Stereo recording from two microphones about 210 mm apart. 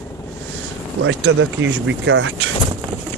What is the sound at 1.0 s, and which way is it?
Speech, 65° right (ahead or behind).